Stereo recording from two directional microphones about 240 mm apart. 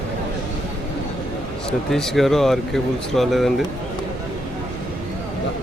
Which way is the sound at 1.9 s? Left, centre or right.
Centre.